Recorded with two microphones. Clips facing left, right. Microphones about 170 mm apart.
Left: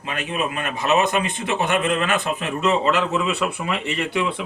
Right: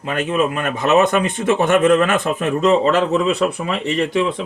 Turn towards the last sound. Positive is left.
turn(degrees=-35)  # may be behind; listen again after turning